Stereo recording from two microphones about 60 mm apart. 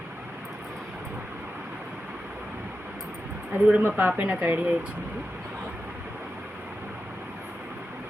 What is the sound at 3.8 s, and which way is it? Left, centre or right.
Speech, right.